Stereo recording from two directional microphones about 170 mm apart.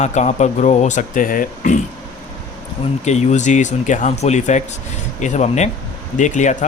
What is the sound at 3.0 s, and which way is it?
A man's voice, 45° left (ahead or behind).